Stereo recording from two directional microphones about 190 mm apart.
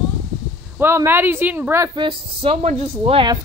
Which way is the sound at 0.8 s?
10° right (ahead or behind).